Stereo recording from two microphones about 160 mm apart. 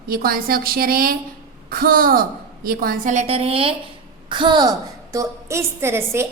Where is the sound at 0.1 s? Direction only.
70° right (ahead or behind).